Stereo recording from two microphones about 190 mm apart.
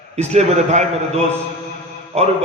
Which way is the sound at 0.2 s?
40° right (ahead or behind).